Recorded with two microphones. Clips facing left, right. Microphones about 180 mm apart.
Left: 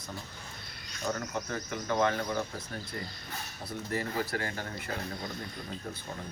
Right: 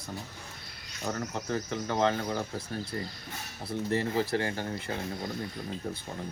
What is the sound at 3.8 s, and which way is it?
Speech, 25° right (ahead or behind).